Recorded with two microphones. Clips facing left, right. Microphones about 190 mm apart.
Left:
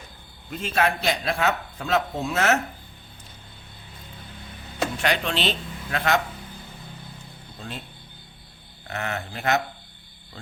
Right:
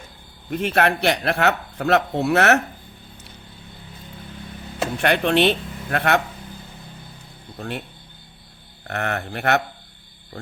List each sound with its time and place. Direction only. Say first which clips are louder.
0.5 s a man's voice: right 4 dB; 65° right (ahead or behind)
4.9 s a man's voice: right 9 dB; 60° right (ahead or behind)
8.9 s speech: right 4 dB; 60° right (ahead or behind)